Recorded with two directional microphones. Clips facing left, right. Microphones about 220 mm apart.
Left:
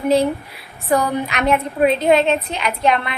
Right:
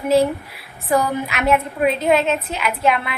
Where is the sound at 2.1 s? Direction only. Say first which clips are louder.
Left 2 dB; 35° left (ahead or behind).